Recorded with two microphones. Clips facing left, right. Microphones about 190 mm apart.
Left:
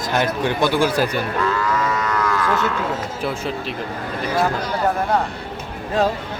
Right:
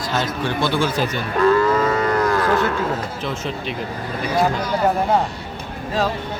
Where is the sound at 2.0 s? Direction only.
35° right (ahead or behind).